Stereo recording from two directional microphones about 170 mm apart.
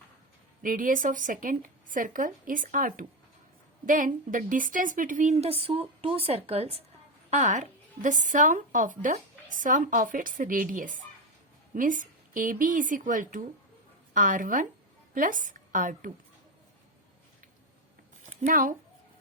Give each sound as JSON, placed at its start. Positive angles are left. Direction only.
{"t": 0.6, "sound": "a woman's voice", "side_deg": -55}
{"t": 18.4, "sound": "a woman's voice", "side_deg": -50}